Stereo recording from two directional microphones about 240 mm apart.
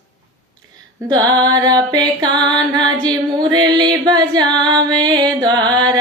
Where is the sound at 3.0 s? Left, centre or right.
Centre.